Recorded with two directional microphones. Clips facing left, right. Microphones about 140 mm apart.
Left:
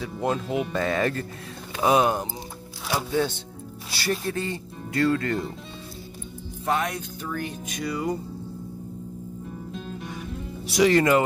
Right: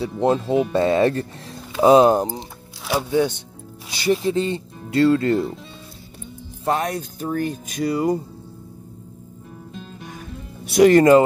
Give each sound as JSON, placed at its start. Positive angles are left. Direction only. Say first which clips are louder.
{"t": 0.2, "sound": "speech", "louder": "right 7 dB", "side_deg": -25}
{"t": 1.8, "sound": "music", "louder": "right 8 dB", "side_deg": -30}
{"t": 3.1, "sound": "speech", "louder": "right 6 dB", "side_deg": -15}
{"t": 6.6, "sound": "music", "louder": "right 4 dB", "side_deg": -40}
{"t": 9.7, "sound": "music", "louder": "even", "side_deg": 0}
{"t": 10.6, "sound": "speech", "louder": "right 7 dB", "side_deg": -55}